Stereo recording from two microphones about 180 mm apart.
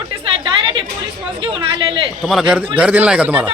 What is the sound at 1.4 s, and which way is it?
Speech, 30° right (ahead or behind).